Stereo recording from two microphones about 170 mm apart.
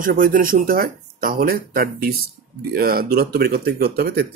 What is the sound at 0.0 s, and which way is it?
Speech, 55° right (ahead or behind).